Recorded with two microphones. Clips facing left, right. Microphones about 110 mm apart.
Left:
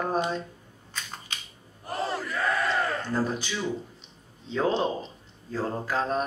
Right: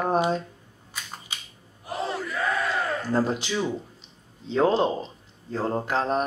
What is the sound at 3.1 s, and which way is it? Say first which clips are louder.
Speech: right 8 dB; 30° right (ahead or behind).